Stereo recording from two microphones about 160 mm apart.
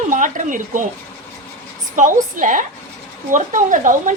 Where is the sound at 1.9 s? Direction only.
55° right (ahead or behind).